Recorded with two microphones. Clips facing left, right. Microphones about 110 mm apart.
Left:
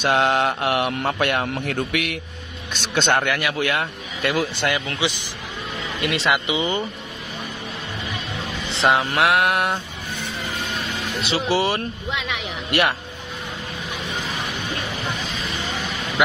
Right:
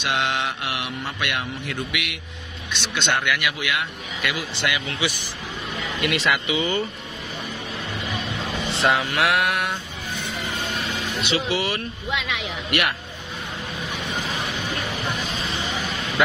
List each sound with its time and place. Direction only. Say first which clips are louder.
0.0 s mantra: left 6 dB; 40° left (ahead or behind)
1.4 s mantra: left 5 dB; 55° left (ahead or behind)
3.5 s speech: left 4 dB; 40° left (ahead or behind)
4.9 s speech: left 2 dB; 25° left (ahead or behind)
8.6 s a sound: left 3 dB; 30° left (ahead or behind)
11.1 s speech: left 4 dB; 30° left (ahead or behind)